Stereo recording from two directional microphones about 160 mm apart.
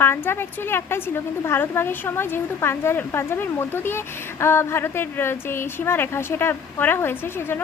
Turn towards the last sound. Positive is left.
turn(degrees=15)  # may be behind; listen again after turning